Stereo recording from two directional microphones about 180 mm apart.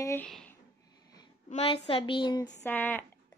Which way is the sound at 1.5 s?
35° left (ahead or behind).